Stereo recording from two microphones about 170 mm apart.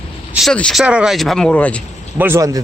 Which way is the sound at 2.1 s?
10° right (ahead or behind).